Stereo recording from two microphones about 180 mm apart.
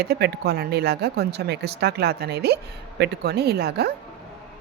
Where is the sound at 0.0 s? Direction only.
65° right (ahead or behind).